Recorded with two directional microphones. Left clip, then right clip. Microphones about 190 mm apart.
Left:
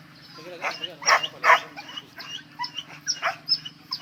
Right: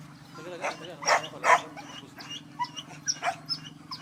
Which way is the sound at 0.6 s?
25° right (ahead or behind).